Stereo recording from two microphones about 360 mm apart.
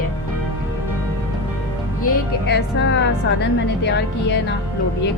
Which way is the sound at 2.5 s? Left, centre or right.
Left.